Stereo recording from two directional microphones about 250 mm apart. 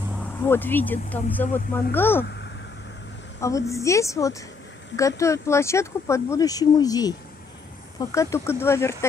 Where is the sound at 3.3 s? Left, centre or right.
Centre.